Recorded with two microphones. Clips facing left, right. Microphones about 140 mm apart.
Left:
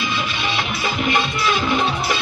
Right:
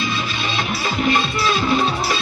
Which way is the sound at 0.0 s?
35° right (ahead or behind).